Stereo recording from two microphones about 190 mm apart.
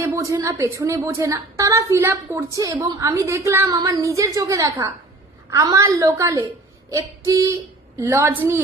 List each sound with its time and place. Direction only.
0.0 s a woman's voice: 15° right (ahead or behind)